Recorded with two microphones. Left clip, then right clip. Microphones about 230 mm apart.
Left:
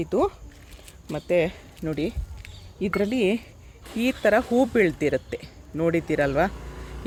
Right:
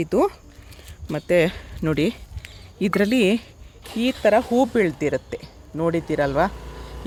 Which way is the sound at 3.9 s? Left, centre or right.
Centre.